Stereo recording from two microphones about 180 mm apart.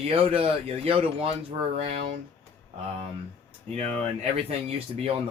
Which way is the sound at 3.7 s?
35° right (ahead or behind).